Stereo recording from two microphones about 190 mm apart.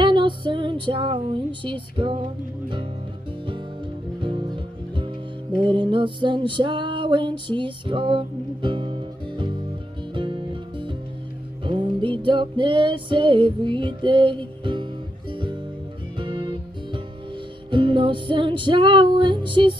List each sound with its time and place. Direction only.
0.0 s music: 25° right (ahead or behind)
4.2 s music: 25° right (ahead or behind)